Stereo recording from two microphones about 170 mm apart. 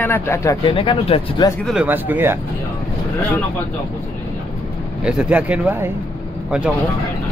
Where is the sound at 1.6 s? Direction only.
5° right (ahead or behind).